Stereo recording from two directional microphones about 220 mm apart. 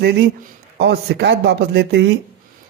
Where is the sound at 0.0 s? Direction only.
50° right (ahead or behind).